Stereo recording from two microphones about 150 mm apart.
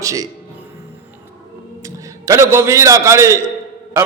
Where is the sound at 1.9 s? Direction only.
20° right (ahead or behind).